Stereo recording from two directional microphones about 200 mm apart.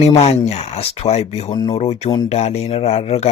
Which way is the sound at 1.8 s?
35° left (ahead or behind).